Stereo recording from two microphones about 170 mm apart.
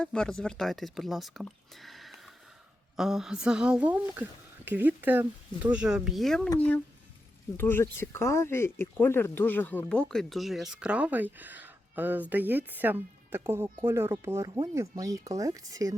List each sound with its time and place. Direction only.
0.0 s speech: 5° left (ahead or behind)
7.5 s speech: 15° left (ahead or behind); by 16.0 s 20° right (ahead or behind)